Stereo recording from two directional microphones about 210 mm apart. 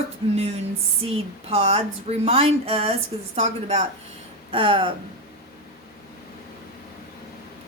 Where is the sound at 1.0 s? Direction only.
25° right (ahead or behind).